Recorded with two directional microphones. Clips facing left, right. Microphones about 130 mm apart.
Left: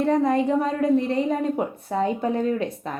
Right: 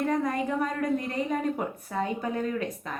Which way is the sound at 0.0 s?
30° left (ahead or behind).